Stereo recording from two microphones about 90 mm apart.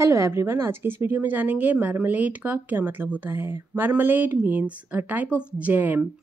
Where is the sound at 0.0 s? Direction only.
35° right (ahead or behind).